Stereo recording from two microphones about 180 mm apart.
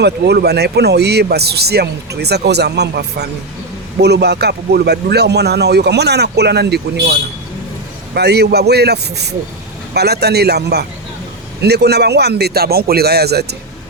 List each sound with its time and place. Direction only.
0.0 s a man's voice: 65° right (ahead or behind)